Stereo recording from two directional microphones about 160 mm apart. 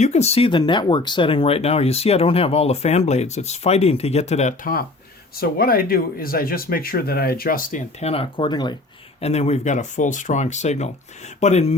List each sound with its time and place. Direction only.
0.0 s speech: 45° left (ahead or behind)
5.4 s speech: 65° left (ahead or behind); by 8.7 s 30° left (ahead or behind)
9.2 s speech: 40° left (ahead or behind)